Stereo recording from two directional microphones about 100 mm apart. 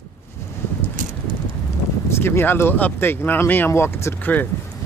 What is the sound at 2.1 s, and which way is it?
Speech, 25° left (ahead or behind).